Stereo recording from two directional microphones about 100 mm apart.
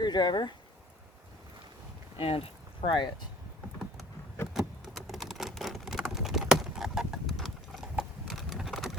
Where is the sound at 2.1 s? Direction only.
75° left (ahead or behind).